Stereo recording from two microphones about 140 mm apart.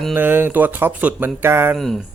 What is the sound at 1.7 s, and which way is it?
Speech, centre (ahead or behind).